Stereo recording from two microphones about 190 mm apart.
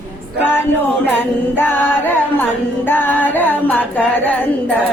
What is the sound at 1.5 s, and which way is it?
Music, 10° left (ahead or behind).